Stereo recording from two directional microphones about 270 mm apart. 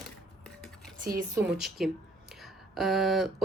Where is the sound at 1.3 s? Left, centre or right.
Centre.